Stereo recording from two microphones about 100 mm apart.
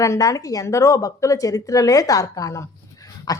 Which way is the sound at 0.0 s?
35° left (ahead or behind).